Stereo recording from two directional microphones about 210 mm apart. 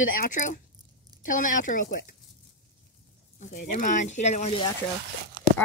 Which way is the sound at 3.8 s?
35° left (ahead or behind).